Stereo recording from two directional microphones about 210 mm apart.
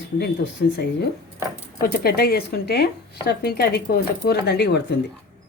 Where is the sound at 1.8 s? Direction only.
45° left (ahead or behind).